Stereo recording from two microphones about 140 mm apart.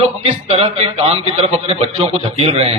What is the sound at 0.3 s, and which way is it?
A man's voice, 50° right (ahead or behind).